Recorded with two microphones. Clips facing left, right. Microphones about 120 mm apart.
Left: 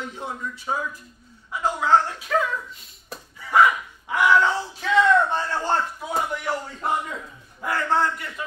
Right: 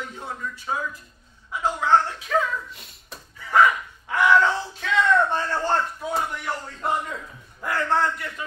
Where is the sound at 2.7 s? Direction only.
75° right (ahead or behind).